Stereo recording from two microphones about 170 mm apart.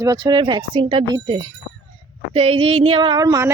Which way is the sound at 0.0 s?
25° right (ahead or behind).